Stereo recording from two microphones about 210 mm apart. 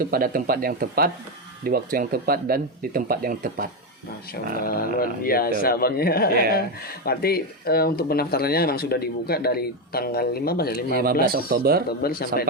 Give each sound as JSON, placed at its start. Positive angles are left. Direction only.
{"t": 0.0, "sound": "speech", "side_deg": -45}
{"t": 4.6, "sound": "speech", "side_deg": 45}
{"t": 11.0, "sound": "speech", "side_deg": -45}
{"t": 11.9, "sound": "speech", "side_deg": 45}